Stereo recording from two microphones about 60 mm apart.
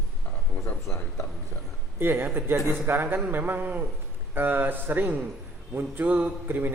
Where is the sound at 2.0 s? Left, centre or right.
Right.